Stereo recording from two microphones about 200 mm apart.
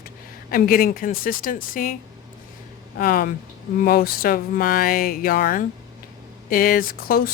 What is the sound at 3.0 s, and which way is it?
Speech, 45° left (ahead or behind).